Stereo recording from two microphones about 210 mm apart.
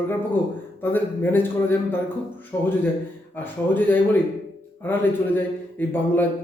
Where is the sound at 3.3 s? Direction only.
10° left (ahead or behind).